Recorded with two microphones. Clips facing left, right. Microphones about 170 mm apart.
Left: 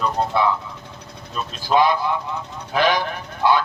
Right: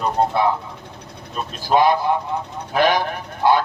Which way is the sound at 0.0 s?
50° right (ahead or behind).